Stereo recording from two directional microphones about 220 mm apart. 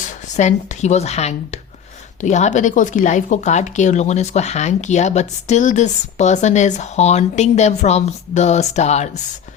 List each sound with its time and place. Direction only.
0.0 s speech: 30° left (ahead or behind)